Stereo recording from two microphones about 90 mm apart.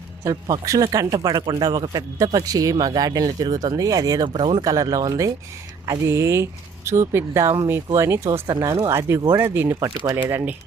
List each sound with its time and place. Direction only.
0.2 s speech: 30° right (ahead or behind)
0.6 s speech: 40° right (ahead or behind)
4.3 s speech: 90° right
4.6 s speech: 45° right (ahead or behind)
8.3 s speech: 50° right (ahead or behind)
8.9 s speech: 30° right (ahead or behind)